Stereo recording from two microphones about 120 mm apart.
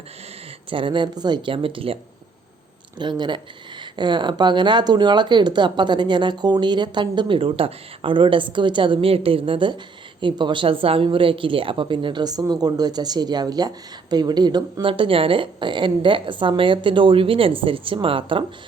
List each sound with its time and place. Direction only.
0.7 s a woman's voice: 45° right (ahead or behind)
3.0 s a woman's voice: 40° right (ahead or behind)